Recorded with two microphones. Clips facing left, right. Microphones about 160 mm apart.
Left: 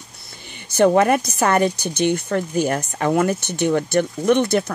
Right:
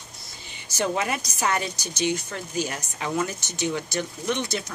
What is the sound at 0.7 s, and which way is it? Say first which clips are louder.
Speech: left 11 dB; 55° left (ahead or behind).